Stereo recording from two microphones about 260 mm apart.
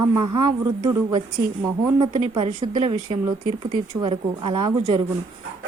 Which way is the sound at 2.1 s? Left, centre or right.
Right.